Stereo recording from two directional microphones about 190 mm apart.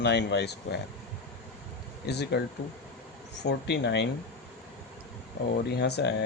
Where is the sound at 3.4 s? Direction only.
60° left (ahead or behind).